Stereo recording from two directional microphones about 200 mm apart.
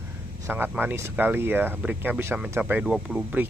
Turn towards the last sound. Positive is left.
turn(degrees=-5)  # may be behind; listen again after turning